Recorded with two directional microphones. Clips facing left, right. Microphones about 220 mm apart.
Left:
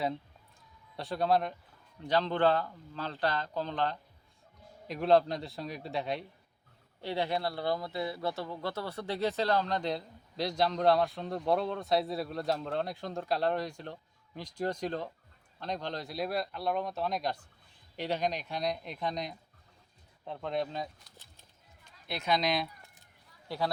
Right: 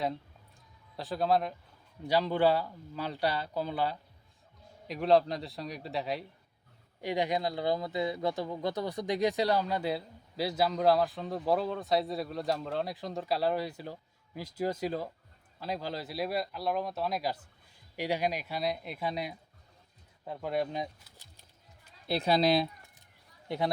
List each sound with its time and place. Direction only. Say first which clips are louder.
0.9 s a man's voice: even; centre (ahead or behind)
7.0 s a man's voice: right 2 dB; 15° right (ahead or behind)
22.0 s speech: right 5 dB; 35° right (ahead or behind)
23.5 s speech: right 2 dB; 20° right (ahead or behind)